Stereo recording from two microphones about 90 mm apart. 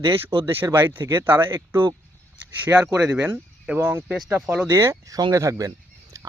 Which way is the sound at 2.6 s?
15° right (ahead or behind).